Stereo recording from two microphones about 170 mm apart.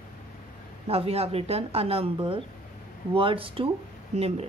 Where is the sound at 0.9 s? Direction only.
35° right (ahead or behind).